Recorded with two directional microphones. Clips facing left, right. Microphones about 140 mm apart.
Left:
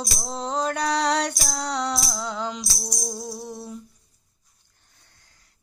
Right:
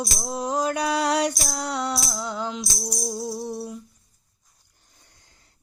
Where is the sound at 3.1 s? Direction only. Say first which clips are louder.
Right 4 dB; 20° right (ahead or behind).